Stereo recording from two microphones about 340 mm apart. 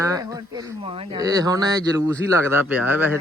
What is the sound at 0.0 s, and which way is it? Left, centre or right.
Speech, centre.